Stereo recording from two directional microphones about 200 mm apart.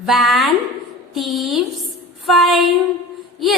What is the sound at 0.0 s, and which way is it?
A woman's voice, centre (ahead or behind).